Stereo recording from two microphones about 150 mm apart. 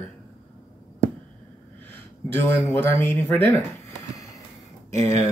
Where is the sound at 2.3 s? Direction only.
15° left (ahead or behind).